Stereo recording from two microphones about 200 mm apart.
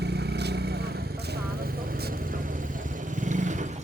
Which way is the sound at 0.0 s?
55° right (ahead or behind).